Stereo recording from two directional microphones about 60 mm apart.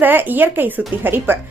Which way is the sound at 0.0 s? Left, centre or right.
Right.